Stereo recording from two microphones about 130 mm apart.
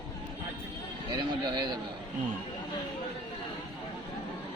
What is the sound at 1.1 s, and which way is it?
Speech, 35° right (ahead or behind).